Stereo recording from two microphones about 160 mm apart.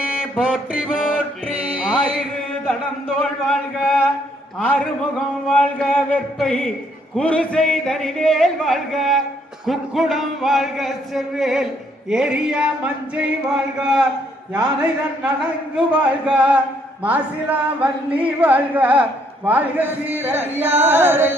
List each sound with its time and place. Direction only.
0.2 s music: 5° right (ahead or behind)
2.6 s speech: centre (ahead or behind)
5.5 s a man's voice: 5° left (ahead or behind); by 21.3 s 15° right (ahead or behind)